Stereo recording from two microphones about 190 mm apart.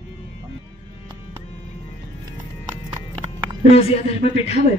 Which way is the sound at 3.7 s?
30° left (ahead or behind).